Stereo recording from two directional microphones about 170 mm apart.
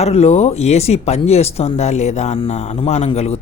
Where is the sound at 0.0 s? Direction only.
40° left (ahead or behind).